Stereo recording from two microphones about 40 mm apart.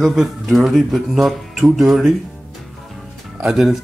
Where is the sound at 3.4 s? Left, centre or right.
Centre.